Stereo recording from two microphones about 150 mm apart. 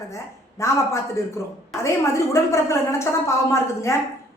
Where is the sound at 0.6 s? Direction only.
20° left (ahead or behind).